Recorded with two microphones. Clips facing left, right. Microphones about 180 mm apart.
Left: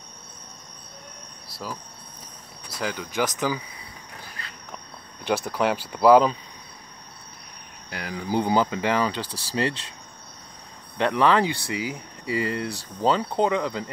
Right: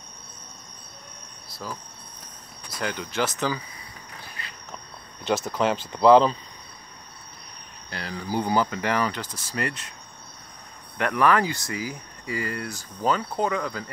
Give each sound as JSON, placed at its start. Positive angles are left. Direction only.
{"t": 1.5, "sound": "cricket", "side_deg": 5}
{"t": 2.8, "sound": "speech", "side_deg": 5}
{"t": 5.2, "sound": "speech", "side_deg": 10}
{"t": 7.9, "sound": "speech", "side_deg": 15}
{"t": 9.2, "sound": "speech", "side_deg": 35}
{"t": 11.0, "sound": "speech", "side_deg": 25}